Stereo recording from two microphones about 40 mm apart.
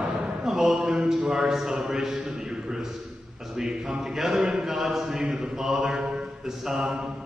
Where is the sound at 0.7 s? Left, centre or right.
Right.